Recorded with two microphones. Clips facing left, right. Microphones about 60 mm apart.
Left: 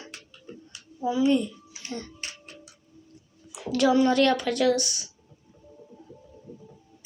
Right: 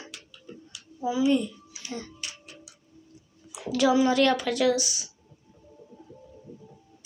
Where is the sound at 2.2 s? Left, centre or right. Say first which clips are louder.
Left 1 dB; left.